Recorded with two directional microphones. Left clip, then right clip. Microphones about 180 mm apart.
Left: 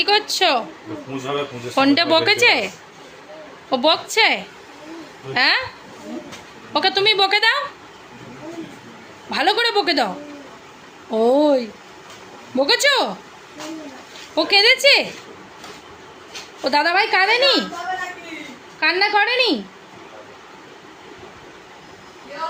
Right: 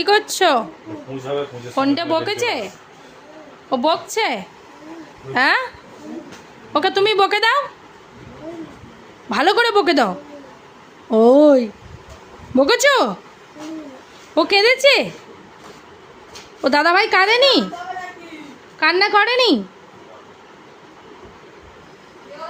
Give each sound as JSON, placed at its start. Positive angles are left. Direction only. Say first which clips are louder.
{"t": 0.0, "sound": "a woman's voice", "louder": "right 2 dB", "side_deg": -45}
{"t": 1.7, "sound": "speech", "louder": "left 3 dB", "side_deg": -5}
{"t": 3.7, "sound": "a woman's voice", "louder": "left 1 dB", "side_deg": -15}
{"t": 5.3, "sound": "a woman's voice", "louder": "right 1 dB", "side_deg": -45}
{"t": 6.7, "sound": "a woman's voice", "louder": "right 1 dB", "side_deg": -50}
{"t": 9.3, "sound": "a woman's voice", "louder": "right 3 dB", "side_deg": -60}
{"t": 11.1, "sound": "a woman's voice", "louder": "right 5 dB", "side_deg": -60}
{"t": 14.3, "sound": "a woman's voice", "louder": "even", "side_deg": -60}
{"t": 16.6, "sound": "a woman's voice", "louder": "right 2 dB", "side_deg": -65}
{"t": 18.8, "sound": "a woman's voice", "louder": "right 2 dB", "side_deg": -65}